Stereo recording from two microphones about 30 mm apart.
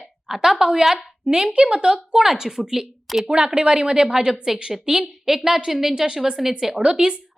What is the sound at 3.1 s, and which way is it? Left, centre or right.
Speech, centre.